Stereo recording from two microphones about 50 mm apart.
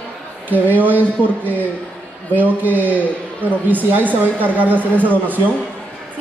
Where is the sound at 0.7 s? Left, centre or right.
Right.